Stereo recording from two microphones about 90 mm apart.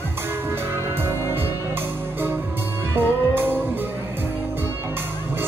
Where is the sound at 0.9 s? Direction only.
25° right (ahead or behind).